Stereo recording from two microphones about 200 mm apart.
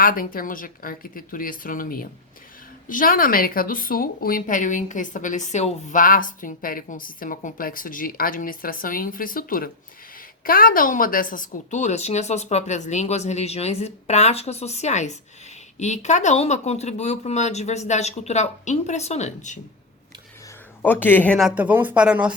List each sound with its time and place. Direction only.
0.0 s a woman's voice: 45° left (ahead or behind)
20.8 s speech: 10° left (ahead or behind); by 22.3 s 5° right (ahead or behind)